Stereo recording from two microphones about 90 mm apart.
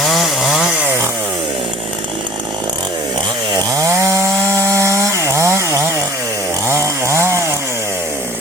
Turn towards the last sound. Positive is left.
turn(degrees=-30)  # may be behind; listen again after turning